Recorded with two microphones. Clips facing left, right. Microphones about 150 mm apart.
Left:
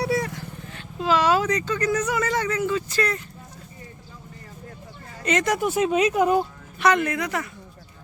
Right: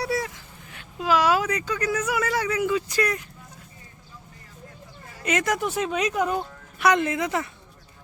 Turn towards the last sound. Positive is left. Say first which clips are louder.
# right 1 dB
turn(degrees=-20)  # may be behind; listen again after turning